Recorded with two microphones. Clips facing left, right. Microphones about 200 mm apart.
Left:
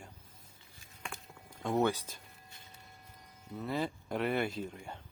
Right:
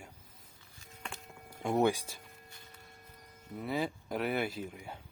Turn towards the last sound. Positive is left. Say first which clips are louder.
# left 1 dB
turn(degrees=-5)  # may be behind; listen again after turning